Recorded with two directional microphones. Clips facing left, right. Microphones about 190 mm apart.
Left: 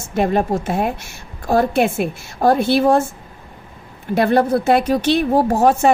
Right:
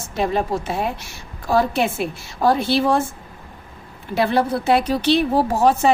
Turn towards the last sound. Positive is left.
turn(degrees=50)  # may be behind; listen again after turning